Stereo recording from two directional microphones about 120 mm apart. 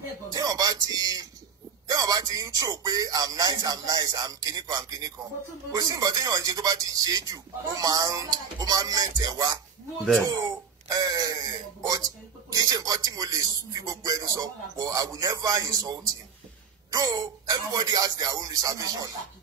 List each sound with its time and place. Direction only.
0.3 s speech: 30° right (ahead or behind)
10.9 s speech: 30° right (ahead or behind)